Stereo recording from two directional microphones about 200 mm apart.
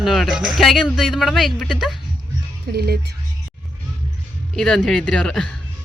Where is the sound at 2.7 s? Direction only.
50° right (ahead or behind).